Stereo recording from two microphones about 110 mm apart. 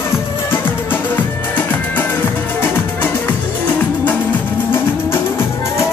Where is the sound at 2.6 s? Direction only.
20° left (ahead or behind).